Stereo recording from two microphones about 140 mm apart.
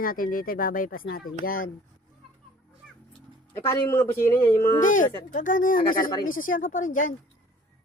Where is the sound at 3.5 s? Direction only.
20° left (ahead or behind).